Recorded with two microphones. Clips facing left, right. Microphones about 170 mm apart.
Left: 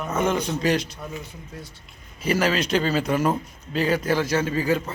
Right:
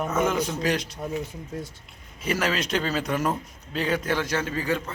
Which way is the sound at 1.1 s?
45° right (ahead or behind).